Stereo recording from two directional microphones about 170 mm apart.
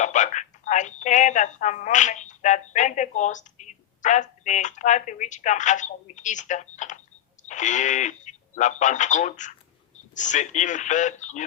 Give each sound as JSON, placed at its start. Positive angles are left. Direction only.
{"t": 0.0, "sound": "speech", "side_deg": 45}